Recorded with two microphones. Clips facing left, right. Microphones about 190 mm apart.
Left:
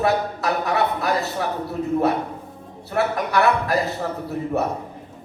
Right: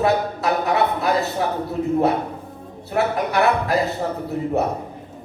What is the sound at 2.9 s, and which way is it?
Speech, 20° right (ahead or behind).